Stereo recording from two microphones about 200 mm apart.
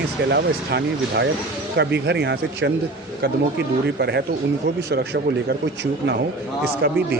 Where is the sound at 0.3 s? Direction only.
55° right (ahead or behind).